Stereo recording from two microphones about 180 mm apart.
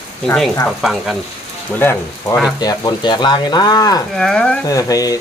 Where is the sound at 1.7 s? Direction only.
10° left (ahead or behind).